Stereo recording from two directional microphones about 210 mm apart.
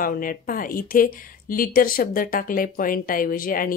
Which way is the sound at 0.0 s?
40° left (ahead or behind).